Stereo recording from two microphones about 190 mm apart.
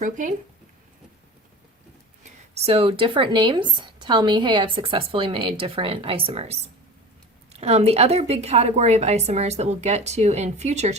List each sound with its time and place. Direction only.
0.0 s a woman's voice: 40° right (ahead or behind)
2.6 s a woman's voice: 30° right (ahead or behind)